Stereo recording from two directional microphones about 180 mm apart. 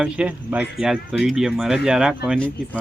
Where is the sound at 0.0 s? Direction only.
5° right (ahead or behind).